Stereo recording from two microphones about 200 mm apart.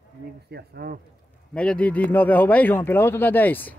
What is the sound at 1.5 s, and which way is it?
Speech, 5° left (ahead or behind).